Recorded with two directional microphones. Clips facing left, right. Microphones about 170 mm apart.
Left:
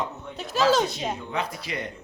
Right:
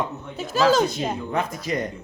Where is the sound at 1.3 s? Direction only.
45° right (ahead or behind).